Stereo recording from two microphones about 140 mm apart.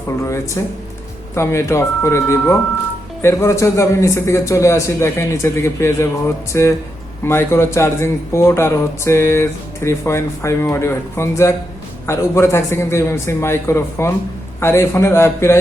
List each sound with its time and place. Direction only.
1.4 s speech: 20° left (ahead or behind)